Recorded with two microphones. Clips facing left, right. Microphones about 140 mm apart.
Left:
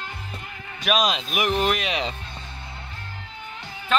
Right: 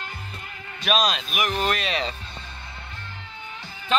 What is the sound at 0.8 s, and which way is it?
Speech, 15° left (ahead or behind).